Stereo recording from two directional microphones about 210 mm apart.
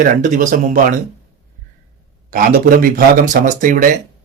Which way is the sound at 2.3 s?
40° right (ahead or behind).